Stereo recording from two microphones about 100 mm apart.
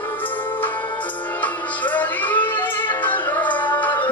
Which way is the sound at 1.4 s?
15° left (ahead or behind).